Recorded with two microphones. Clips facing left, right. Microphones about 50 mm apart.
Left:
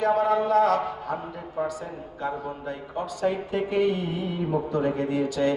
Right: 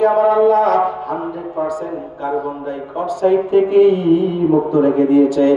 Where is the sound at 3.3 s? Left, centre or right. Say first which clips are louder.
Right 14 dB; right.